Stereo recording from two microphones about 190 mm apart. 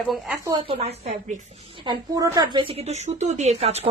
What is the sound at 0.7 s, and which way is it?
Speech, 35° right (ahead or behind).